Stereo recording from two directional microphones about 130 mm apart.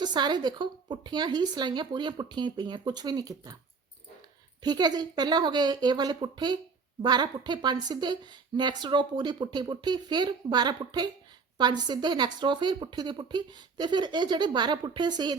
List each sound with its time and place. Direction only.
0.0 s speech: 35° right (ahead or behind)
4.6 s speech: 30° right (ahead or behind)